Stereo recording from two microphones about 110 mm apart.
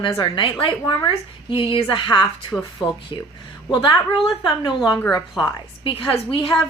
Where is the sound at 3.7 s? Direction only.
45° left (ahead or behind).